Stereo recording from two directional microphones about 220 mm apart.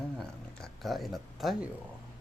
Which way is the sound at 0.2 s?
Centre (ahead or behind).